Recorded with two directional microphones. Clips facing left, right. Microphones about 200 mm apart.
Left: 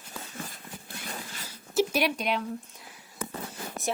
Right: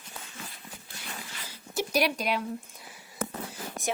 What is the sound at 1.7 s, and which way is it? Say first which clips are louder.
Speech: left 2 dB; centre (ahead or behind).